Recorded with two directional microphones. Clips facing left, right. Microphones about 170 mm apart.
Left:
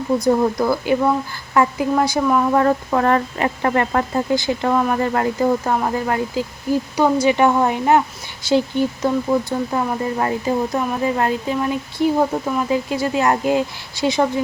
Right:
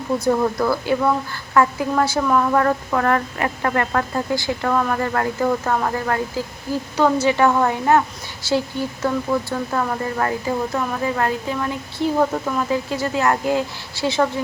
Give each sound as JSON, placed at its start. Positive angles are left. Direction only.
{"t": 0.2, "sound": "speech", "side_deg": 15}